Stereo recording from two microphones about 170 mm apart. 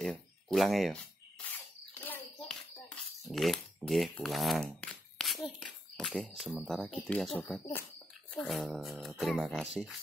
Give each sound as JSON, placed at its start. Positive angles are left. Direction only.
{"t": 0.0, "sound": "speech", "side_deg": 0}
{"t": 2.0, "sound": "a sound", "side_deg": 10}
{"t": 7.1, "sound": "speech", "side_deg": 5}
{"t": 8.4, "sound": "speech", "side_deg": 0}